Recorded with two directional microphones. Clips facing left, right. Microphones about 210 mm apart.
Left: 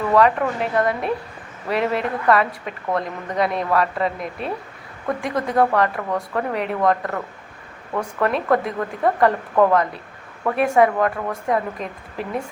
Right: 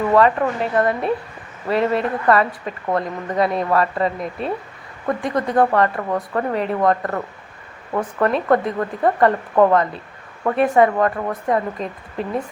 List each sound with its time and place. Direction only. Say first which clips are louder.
0.1 s a woman's voice: even; centre (ahead or behind)
11.8 s speech: right 3 dB; 30° right (ahead or behind)